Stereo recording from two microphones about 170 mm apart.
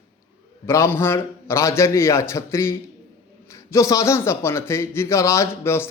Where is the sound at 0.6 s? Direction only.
15° left (ahead or behind).